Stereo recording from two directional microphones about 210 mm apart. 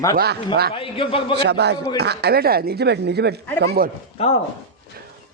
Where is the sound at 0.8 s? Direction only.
25° left (ahead or behind).